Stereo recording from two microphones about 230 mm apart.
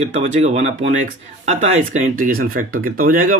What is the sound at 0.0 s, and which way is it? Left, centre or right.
Speech, right.